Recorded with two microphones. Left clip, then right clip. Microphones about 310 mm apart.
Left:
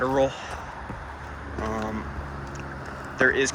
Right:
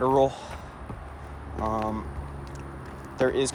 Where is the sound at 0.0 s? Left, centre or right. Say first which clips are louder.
Right 1 dB; centre.